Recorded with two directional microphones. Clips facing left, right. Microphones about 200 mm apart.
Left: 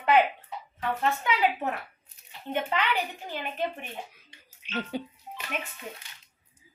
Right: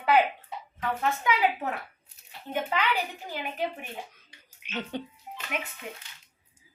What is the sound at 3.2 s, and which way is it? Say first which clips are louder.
Speech: even; 10° right (ahead or behind).